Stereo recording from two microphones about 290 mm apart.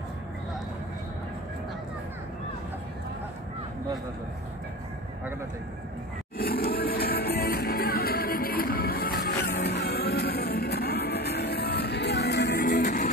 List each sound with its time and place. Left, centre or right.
6.3 s music: left